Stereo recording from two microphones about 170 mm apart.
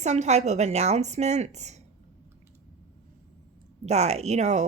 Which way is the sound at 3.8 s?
40° right (ahead or behind).